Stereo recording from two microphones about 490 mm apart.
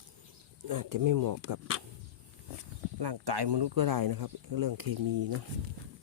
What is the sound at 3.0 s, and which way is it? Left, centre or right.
Speech, right.